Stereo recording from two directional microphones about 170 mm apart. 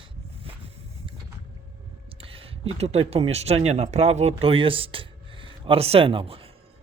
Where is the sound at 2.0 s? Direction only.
35° right (ahead or behind).